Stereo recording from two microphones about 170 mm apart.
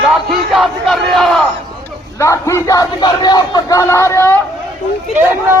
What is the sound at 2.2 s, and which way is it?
Speech, 20° left (ahead or behind).